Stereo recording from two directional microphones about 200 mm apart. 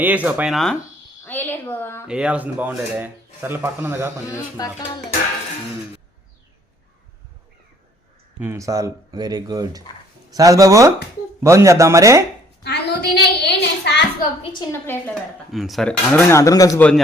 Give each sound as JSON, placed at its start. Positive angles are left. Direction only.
{"t": 0.0, "sound": "a woman's voice", "side_deg": -5}
{"t": 2.0, "sound": "speech", "side_deg": -5}
{"t": 4.3, "sound": "speech", "side_deg": 15}
{"t": 8.4, "sound": "speech", "side_deg": -15}
{"t": 12.6, "sound": "a sound", "side_deg": 55}
{"t": 14.7, "sound": "speech", "side_deg": 10}
{"t": 15.5, "sound": "speech", "side_deg": 0}